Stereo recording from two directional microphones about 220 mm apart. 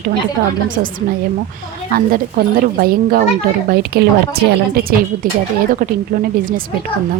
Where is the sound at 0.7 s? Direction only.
40° right (ahead or behind).